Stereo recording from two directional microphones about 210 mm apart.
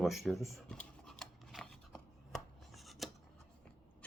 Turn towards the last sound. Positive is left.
turn(degrees=0)  # may be behind; listen again after turning